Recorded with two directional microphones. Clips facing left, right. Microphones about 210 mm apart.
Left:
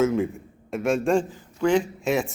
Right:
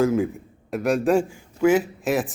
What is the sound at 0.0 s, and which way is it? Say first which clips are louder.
A man's voice: right 1 dB; centre (ahead or behind).